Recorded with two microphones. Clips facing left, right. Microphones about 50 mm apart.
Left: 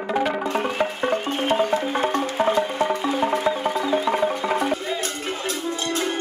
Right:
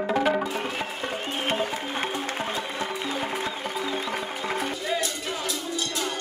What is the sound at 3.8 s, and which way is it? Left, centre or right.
Music, left.